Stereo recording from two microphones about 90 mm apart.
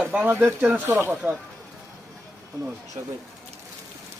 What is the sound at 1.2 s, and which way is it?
Speech, 10° right (ahead or behind).